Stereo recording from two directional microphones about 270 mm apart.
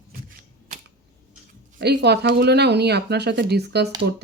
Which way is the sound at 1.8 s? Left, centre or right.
Right.